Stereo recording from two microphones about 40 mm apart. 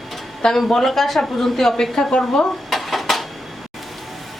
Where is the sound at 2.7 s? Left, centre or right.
Centre.